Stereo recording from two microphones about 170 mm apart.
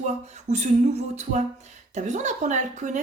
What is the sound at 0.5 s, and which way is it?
Speech, 40° right (ahead or behind).